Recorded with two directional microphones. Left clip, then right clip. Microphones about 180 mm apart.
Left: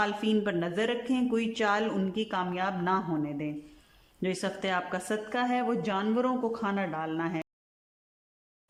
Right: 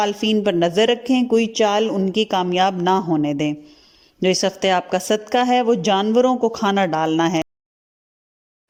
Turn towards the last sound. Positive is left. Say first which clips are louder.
# right 14 dB
turn(degrees=-40)  # may be behind; listen again after turning